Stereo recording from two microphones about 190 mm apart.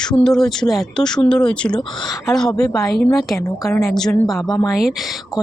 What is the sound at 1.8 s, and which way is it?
Speech, 25° left (ahead or behind).